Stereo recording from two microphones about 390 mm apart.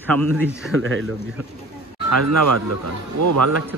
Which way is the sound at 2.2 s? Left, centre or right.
Right.